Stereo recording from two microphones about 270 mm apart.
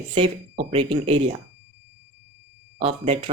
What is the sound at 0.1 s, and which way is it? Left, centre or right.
Speech, right.